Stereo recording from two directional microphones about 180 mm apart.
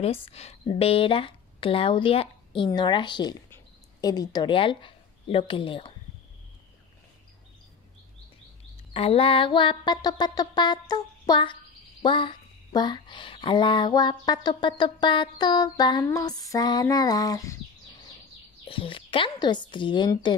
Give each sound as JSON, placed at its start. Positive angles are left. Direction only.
{"t": 0.0, "sound": "speech", "side_deg": 35}
{"t": 8.9, "sound": "speech", "side_deg": 30}
{"t": 18.7, "sound": "speech", "side_deg": 30}